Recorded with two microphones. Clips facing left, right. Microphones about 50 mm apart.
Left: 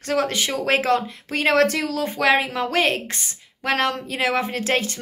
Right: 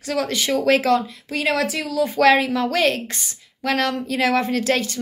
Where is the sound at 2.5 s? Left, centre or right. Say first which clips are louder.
Right 2 dB; left.